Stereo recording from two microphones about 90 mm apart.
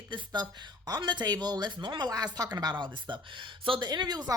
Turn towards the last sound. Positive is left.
turn(degrees=-50)  # may be behind; listen again after turning